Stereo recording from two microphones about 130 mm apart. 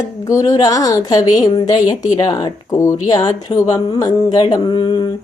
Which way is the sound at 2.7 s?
20° left (ahead or behind).